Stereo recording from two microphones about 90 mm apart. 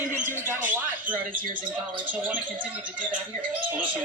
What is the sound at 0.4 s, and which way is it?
Squawk, 25° right (ahead or behind).